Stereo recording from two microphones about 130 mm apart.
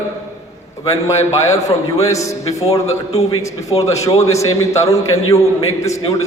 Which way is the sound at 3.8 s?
25° left (ahead or behind).